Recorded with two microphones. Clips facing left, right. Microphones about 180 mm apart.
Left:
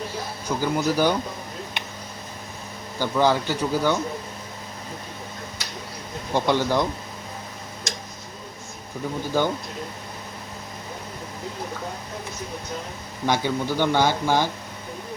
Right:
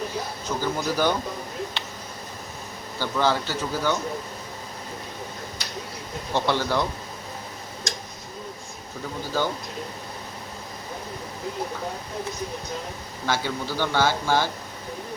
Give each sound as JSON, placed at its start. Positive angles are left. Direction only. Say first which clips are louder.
{"t": 0.4, "sound": "speech", "louder": "left 4 dB", "side_deg": 10}
{"t": 1.8, "sound": "a sound", "louder": "even", "side_deg": 15}
{"t": 3.0, "sound": "speech", "louder": "left 3 dB", "side_deg": 15}
{"t": 6.3, "sound": "speech", "louder": "left 3 dB", "side_deg": 15}
{"t": 13.2, "sound": "speech", "louder": "left 4 dB", "side_deg": 15}